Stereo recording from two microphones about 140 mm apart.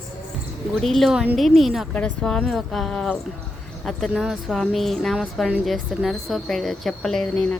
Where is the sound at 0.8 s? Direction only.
Centre (ahead or behind).